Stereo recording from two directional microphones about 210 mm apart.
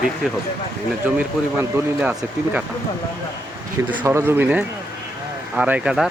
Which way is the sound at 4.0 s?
15° right (ahead or behind).